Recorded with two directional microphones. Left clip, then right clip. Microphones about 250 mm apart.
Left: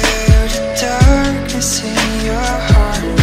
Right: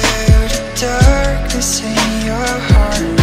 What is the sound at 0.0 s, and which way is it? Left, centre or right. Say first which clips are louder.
Music: even; centre.